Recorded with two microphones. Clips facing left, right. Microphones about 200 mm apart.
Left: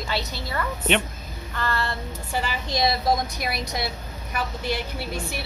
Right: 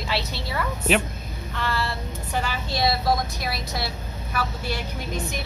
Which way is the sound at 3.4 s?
20° left (ahead or behind).